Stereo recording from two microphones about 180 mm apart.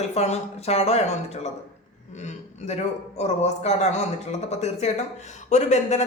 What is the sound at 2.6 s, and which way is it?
Speech, 40° left (ahead or behind).